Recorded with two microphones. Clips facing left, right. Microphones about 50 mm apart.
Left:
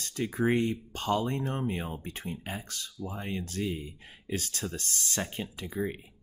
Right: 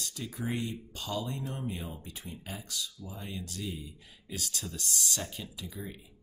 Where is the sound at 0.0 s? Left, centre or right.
Left.